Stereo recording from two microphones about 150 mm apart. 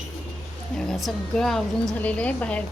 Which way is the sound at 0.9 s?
Centre (ahead or behind).